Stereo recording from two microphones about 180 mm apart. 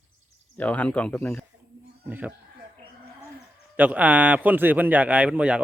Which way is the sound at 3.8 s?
10° right (ahead or behind).